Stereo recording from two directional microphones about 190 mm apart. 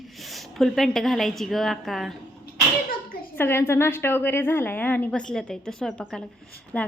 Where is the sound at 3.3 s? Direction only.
10° left (ahead or behind).